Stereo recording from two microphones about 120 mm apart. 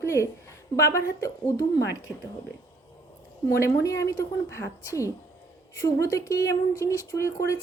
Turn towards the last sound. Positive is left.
turn(degrees=25)  # may be behind; listen again after turning